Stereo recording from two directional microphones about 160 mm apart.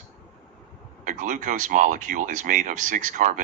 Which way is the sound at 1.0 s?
55° right (ahead or behind).